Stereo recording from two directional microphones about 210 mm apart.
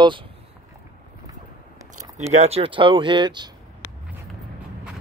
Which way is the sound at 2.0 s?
30° right (ahead or behind).